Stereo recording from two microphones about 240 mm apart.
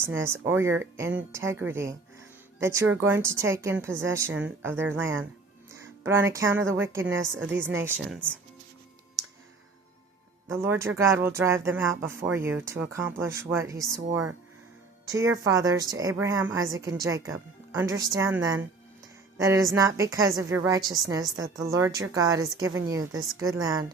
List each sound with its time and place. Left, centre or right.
0.2 s speech: centre
10.5 s speech: centre
19.4 s speech: centre